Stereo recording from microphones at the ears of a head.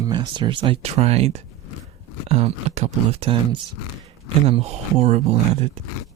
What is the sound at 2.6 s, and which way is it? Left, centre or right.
Speech, right.